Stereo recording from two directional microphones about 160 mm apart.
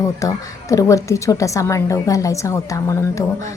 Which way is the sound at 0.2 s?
20° left (ahead or behind).